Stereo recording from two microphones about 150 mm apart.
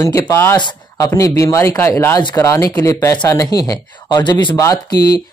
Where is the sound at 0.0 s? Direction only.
20° left (ahead or behind).